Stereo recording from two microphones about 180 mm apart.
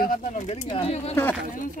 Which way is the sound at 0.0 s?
45° left (ahead or behind).